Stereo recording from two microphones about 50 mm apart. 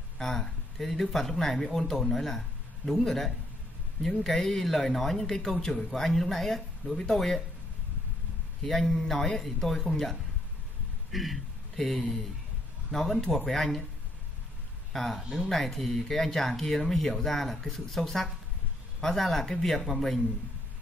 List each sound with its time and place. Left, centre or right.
0.2 s speech: centre
8.6 s speech: centre
14.9 s speech: centre